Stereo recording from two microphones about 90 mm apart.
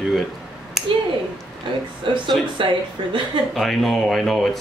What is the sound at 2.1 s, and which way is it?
Speech, 65° right (ahead or behind).